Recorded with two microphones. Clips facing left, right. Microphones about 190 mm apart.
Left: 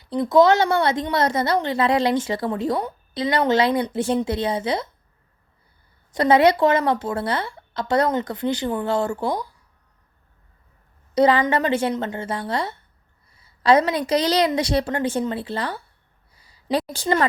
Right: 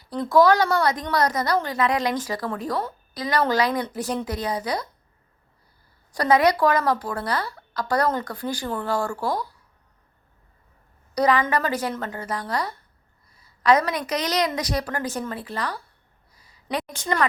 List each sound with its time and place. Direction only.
0.0 s speech: 20° left (ahead or behind)
6.1 s speech: 25° left (ahead or behind)
11.1 s a woman's voice: 30° left (ahead or behind)
13.3 s a sound: 30° left (ahead or behind)
14.1 s speech: 30° left (ahead or behind)
16.4 s a sound: 30° left (ahead or behind)